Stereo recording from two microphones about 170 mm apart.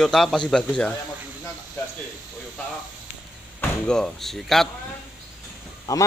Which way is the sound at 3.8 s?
5° left (ahead or behind).